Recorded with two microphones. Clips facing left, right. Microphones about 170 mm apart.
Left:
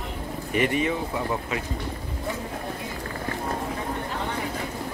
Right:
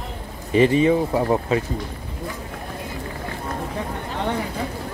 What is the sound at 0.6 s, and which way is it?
Speech, 30° right (ahead or behind).